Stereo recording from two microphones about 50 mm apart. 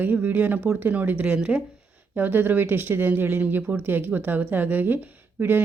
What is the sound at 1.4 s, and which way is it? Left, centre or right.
Speech, centre.